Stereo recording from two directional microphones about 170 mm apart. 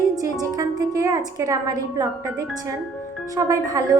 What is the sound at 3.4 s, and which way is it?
Speech, 20° right (ahead or behind).